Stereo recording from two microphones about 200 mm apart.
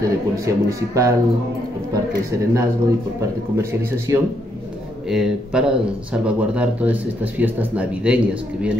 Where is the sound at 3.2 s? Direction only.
15° right (ahead or behind).